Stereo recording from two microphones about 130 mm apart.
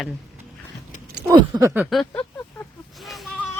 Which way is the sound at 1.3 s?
25° right (ahead or behind).